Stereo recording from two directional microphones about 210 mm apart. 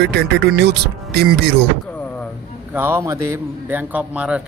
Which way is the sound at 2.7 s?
10° right (ahead or behind).